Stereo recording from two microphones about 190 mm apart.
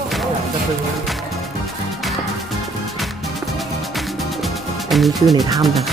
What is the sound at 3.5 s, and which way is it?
Music, centre (ahead or behind).